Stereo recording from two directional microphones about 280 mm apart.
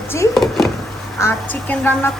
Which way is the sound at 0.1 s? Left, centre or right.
Centre.